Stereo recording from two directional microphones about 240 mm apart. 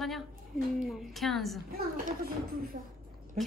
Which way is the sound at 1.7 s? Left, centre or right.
Right.